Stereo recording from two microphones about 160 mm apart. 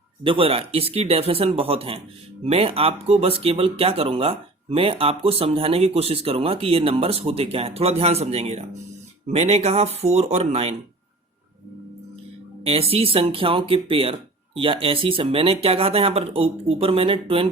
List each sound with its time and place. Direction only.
0.3 s speech: 35° right (ahead or behind)
12.6 s speech: 40° right (ahead or behind)